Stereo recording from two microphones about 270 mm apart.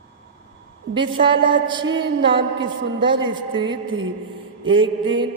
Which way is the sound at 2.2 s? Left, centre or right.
Centre.